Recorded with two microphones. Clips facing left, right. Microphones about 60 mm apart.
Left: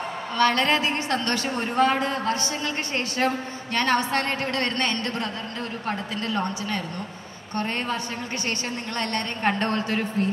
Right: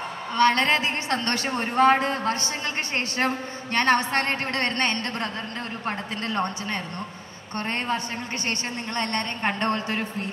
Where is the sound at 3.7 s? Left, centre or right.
Right.